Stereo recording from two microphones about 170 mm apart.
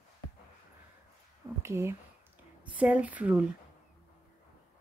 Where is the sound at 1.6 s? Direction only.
15° right (ahead or behind).